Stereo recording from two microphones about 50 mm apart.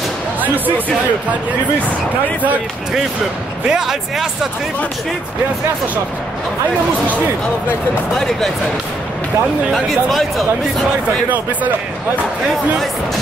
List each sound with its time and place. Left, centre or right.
3.6 s speech: centre
8.1 s speech: centre
9.8 s speech: centre
11.2 s speech: right